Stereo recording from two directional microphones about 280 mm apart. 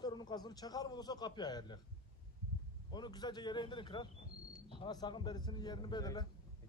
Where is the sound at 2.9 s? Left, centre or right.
Centre.